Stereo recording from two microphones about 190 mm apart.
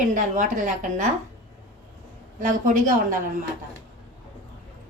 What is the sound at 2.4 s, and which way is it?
Speech, 45° right (ahead or behind).